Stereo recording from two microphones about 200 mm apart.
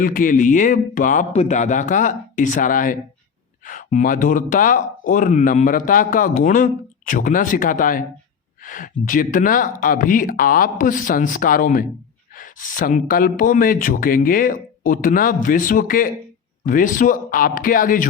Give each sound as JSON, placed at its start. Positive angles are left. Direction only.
{"t": 0.0, "sound": "speech", "side_deg": 45}